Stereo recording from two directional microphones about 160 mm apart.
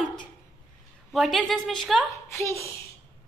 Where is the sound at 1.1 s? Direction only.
Centre (ahead or behind).